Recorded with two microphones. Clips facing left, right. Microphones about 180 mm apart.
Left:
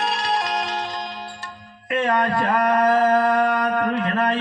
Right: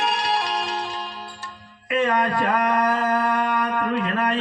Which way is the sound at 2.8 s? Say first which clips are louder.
Left 5 dB; 40° left (ahead or behind).